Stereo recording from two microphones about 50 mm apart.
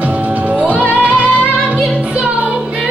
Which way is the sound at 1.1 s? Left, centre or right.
Left.